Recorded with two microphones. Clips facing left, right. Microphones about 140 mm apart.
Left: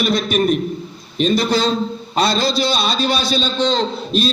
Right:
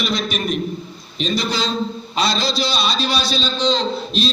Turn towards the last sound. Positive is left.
turn(degrees=55)  # may be behind; listen again after turning